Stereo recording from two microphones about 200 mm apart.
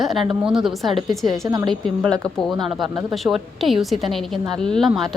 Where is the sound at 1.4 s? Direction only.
20° right (ahead or behind).